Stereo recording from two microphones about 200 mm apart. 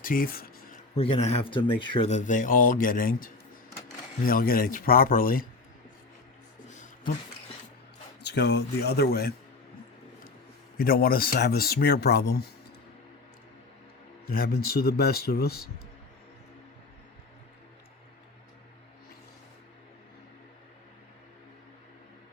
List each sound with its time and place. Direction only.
0.0 s a sound: 45° left (ahead or behind)
0.9 s speech: 30° left (ahead or behind); by 5.5 s 45° left (ahead or behind)
8.2 s speech: 55° left (ahead or behind)
10.8 s speech: 45° left (ahead or behind)
14.3 s speech: 50° left (ahead or behind)